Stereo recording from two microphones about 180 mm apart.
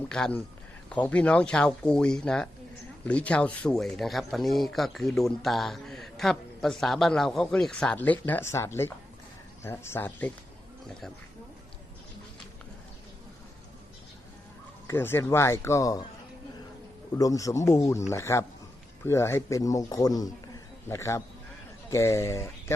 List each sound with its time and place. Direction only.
0.1 s speech: 5° left (ahead or behind)
14.8 s speech: 15° left (ahead or behind)
17.2 s speech: 20° left (ahead or behind)